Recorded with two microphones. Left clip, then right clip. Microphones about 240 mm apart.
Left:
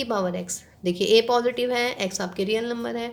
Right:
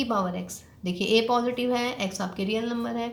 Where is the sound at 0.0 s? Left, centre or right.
Left.